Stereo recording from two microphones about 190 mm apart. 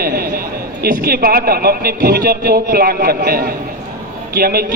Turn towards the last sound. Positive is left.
turn(degrees=-55)  # may be behind; listen again after turning